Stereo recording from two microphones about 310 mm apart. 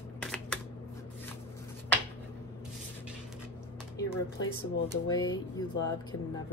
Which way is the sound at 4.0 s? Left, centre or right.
Left.